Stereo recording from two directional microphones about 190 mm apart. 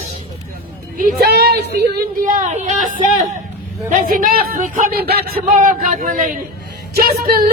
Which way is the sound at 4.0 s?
45° right (ahead or behind).